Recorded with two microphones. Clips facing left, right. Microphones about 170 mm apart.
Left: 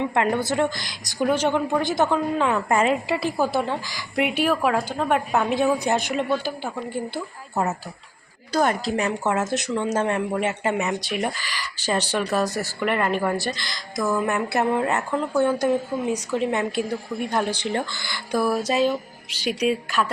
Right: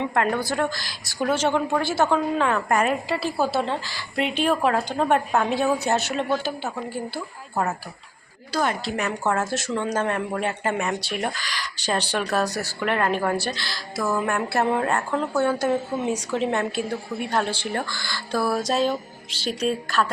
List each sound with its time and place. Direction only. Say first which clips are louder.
0.1 s a woman's voice: left 1 dB; 20° left (ahead or behind); by 5.5 s 5° left (ahead or behind)
5.5 s a woman's voice: left 1 dB; 15° left (ahead or behind)
8.5 s a woman's voice: left 3 dB; 45° left (ahead or behind)
9.2 s a woman's voice: left 1 dB; 20° left (ahead or behind)
11.1 s a woman's voice: left 1 dB; 5° left (ahead or behind)
12.5 s speech: left 1 dB; 35° right (ahead or behind)
12.8 s speech: even; 5° left (ahead or behind)
13.6 s a woman's voice: left 1 dB; 15° left (ahead or behind)